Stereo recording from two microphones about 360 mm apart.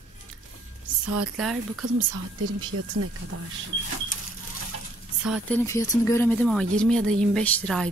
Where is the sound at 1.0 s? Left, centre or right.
Right.